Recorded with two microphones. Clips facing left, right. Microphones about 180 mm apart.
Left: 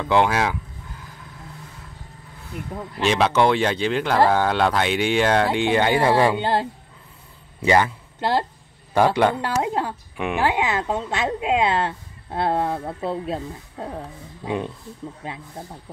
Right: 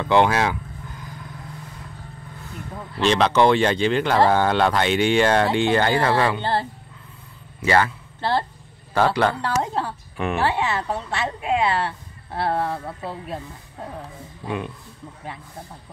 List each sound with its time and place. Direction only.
0.0 s speech: 5° left (ahead or behind)
3.0 s speech: 5° left (ahead or behind)
7.6 s a man's voice: 15° left (ahead or behind)
14.4 s speech: 20° left (ahead or behind)